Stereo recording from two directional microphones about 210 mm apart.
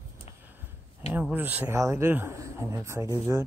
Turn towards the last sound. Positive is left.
turn(degrees=-15)  # may be behind; listen again after turning